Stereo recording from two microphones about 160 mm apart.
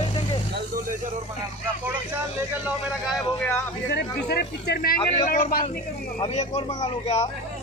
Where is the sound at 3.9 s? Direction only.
85° left.